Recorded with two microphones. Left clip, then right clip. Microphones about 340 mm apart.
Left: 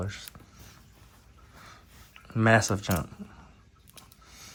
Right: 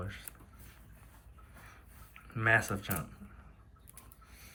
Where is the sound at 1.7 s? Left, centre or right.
Centre.